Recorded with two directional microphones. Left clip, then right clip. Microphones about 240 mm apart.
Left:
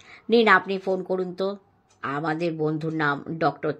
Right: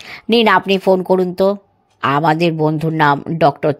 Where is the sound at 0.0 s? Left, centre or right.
Right.